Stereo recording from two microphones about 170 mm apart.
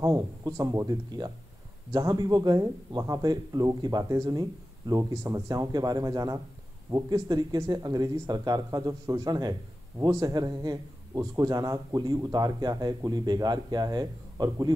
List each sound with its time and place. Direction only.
0.0 s speech: 20° right (ahead or behind)